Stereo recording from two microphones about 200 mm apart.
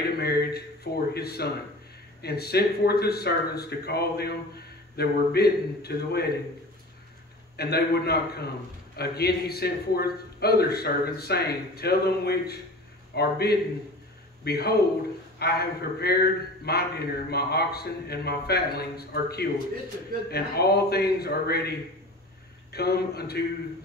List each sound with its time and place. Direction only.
0.2 s a sound: 50° left (ahead or behind)
2.2 s a man's voice: 55° left (ahead or behind)
7.5 s a man's voice: 50° left (ahead or behind)